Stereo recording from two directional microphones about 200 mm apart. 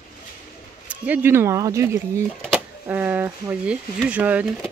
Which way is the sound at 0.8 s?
10° right (ahead or behind).